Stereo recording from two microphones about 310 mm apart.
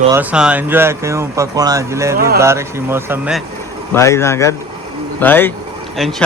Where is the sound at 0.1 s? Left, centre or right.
Centre.